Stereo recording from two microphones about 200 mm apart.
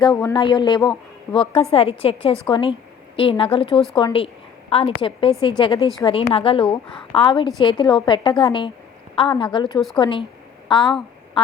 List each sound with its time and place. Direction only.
0.2 s a woman's voice: 20° left (ahead or behind)